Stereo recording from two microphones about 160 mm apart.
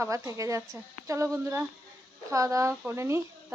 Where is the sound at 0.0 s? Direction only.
20° right (ahead or behind).